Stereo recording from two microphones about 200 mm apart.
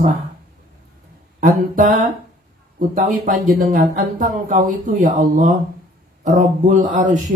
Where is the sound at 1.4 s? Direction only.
40° right (ahead or behind).